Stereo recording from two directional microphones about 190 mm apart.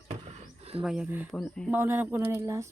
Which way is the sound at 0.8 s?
5° right (ahead or behind).